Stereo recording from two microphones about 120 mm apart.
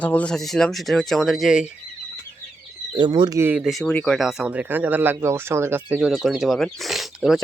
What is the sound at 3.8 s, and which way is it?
Speech, 10° left (ahead or behind).